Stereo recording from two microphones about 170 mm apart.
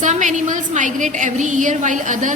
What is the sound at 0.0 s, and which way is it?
A woman's voice, 45° right (ahead or behind).